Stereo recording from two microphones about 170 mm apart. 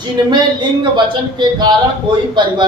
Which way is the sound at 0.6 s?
25° right (ahead or behind).